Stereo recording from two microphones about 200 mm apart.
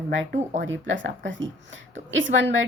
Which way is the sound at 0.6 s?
70° right (ahead or behind).